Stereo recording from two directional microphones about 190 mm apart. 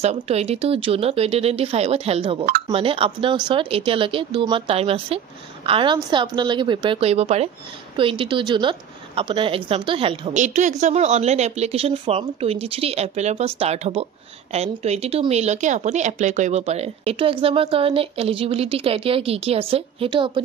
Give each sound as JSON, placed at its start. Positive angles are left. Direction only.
{"t": 0.0, "sound": "a woman's voice", "side_deg": -35}
{"t": 10.3, "sound": "a woman's voice", "side_deg": -40}